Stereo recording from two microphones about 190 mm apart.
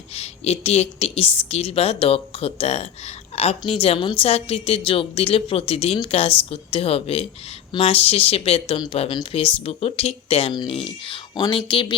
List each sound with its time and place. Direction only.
0.1 s a woman's voice: 30° left (ahead or behind)